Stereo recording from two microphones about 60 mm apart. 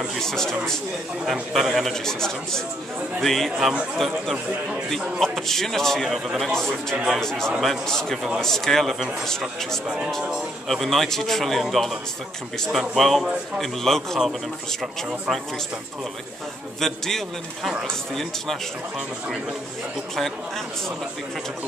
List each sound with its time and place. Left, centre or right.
0.1 s speech: centre
1.2 s a man's voice: centre
3.5 s speech: centre
3.9 s a man's voice: centre
6.4 s a man's voice: centre
9.8 s speech: centre
10.7 s a man's voice: centre
16.8 s speech: centre
20.2 s a man's voice: centre